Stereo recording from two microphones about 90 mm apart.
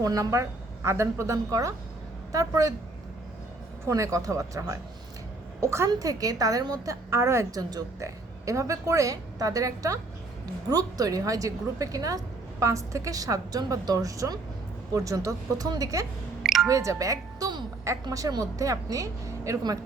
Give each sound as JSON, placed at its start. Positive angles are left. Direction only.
{"t": 0.0, "sound": "a woman's voice", "side_deg": -40}
{"t": 3.8, "sound": "a woman's voice", "side_deg": -35}
{"t": 7.1, "sound": "a woman's voice", "side_deg": -30}
{"t": 7.5, "sound": "a woman's voice", "side_deg": -45}
{"t": 16.4, "sound": "music", "side_deg": 0}
{"t": 16.6, "sound": "a woman's voice", "side_deg": -35}